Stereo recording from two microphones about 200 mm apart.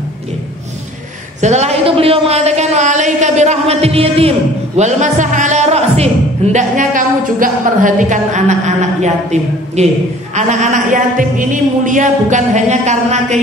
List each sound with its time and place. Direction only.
1.4 s a man's voice: 35° right (ahead or behind)